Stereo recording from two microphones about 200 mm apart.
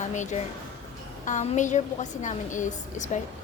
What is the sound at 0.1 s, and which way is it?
A woman's voice, 35° left (ahead or behind).